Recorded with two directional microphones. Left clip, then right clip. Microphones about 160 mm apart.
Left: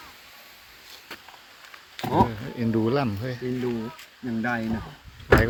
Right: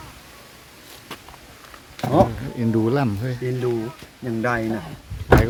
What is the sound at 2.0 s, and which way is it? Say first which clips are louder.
Insect: right 4 dB; 90° left.